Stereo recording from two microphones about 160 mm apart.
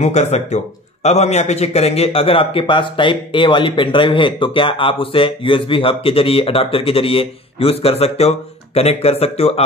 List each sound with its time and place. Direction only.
0.0 s a man's voice: 45° left (ahead or behind)